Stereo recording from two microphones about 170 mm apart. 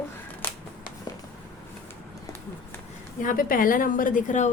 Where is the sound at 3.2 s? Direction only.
50° left (ahead or behind).